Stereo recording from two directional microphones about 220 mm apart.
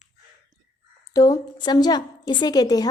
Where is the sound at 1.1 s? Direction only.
15° left (ahead or behind).